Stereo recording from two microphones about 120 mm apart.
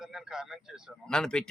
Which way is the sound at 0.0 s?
5° right (ahead or behind).